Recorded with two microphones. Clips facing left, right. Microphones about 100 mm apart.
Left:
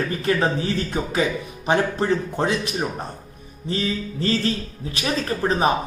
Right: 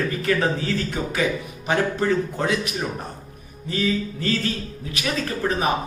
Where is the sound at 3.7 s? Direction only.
25° left (ahead or behind).